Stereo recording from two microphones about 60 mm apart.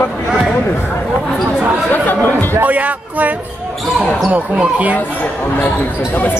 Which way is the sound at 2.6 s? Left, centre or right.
Right.